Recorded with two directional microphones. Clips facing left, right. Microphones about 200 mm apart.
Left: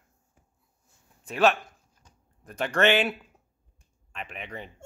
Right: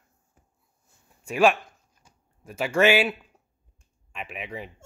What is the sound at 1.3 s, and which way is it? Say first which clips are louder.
Speech: right 2 dB; 10° right (ahead or behind).